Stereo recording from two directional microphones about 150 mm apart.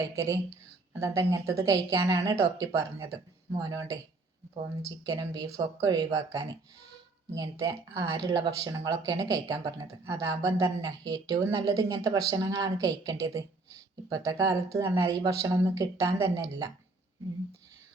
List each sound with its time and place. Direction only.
0.0 s speech: 20° right (ahead or behind)
5.0 s speech: 25° right (ahead or behind)